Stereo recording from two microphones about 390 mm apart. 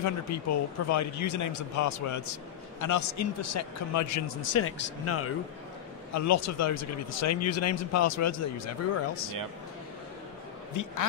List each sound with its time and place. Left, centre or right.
0.0 s a man's voice: left
10.7 s speech: left